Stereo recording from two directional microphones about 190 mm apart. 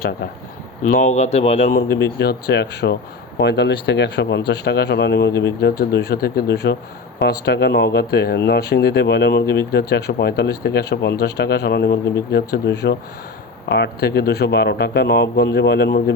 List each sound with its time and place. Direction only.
0.9 s speech: 40° left (ahead or behind)
1.9 s speech: 55° left (ahead or behind)